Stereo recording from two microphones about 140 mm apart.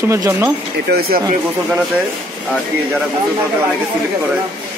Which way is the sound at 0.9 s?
90° right.